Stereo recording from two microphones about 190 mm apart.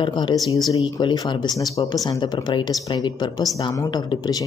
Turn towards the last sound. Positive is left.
turn(degrees=20)  # may be behind; listen again after turning